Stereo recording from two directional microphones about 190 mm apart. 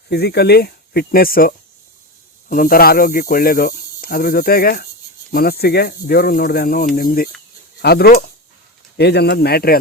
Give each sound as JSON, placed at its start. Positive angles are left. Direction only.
{"t": 0.1, "sound": "speech", "side_deg": 60}